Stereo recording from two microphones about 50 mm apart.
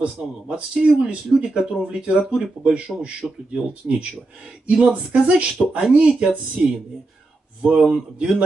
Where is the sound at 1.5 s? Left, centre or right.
Centre.